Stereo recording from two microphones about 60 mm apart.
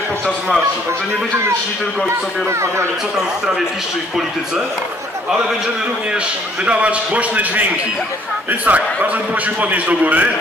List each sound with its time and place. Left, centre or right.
6.6 s a man's voice: right